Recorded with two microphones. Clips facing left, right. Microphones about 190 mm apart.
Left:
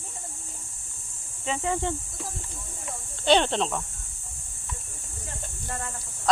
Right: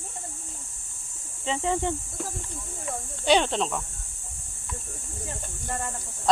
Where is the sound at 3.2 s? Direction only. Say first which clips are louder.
Left 1 dB; 5° right (ahead or behind).